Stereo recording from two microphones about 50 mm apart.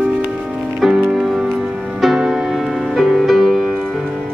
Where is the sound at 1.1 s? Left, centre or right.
Centre.